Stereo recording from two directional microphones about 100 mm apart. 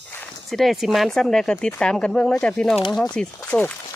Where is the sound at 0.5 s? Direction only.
Centre (ahead or behind).